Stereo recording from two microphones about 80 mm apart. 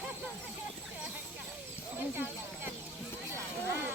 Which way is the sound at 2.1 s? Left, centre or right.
Right.